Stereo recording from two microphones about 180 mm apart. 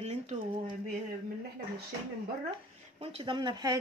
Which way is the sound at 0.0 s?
40° right (ahead or behind).